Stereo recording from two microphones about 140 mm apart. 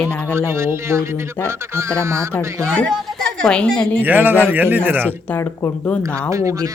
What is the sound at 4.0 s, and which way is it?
A man's voice, 15° right (ahead or behind).